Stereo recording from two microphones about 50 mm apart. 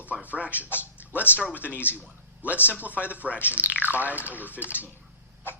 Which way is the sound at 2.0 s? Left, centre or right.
Right.